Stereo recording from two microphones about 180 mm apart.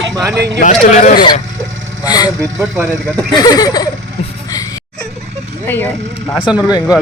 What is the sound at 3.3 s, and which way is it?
Speech, 20° left (ahead or behind).